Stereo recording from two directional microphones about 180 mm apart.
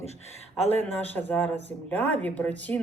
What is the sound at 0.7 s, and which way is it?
Speech, 10° left (ahead or behind).